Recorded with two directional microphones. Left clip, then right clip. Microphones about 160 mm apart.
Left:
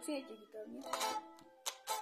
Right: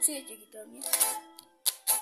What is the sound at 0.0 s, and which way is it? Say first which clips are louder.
Speech: right 5 dB; 35° right (ahead or behind).